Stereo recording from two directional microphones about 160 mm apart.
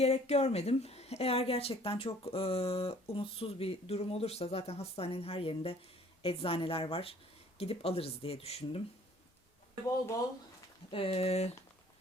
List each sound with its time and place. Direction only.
0.0 s a woman's voice: 40° left (ahead or behind)
10.9 s a woman's voice: 35° left (ahead or behind)